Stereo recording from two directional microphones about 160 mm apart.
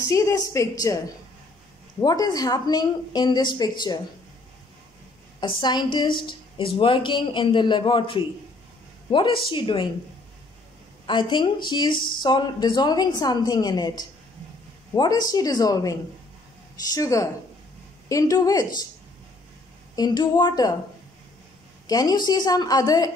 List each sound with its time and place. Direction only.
0.0 s speech: 20° left (ahead or behind)
5.4 s a man's voice: 30° left (ahead or behind)
11.1 s speech: 30° left (ahead or behind)
20.0 s speech: 25° left (ahead or behind)
21.8 s speech: 25° left (ahead or behind)